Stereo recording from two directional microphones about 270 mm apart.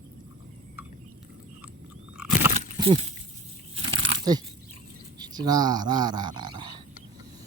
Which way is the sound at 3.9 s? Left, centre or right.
Right.